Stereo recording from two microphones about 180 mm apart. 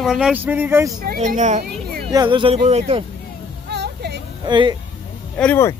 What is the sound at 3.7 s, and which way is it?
Music, 70° right (ahead or behind).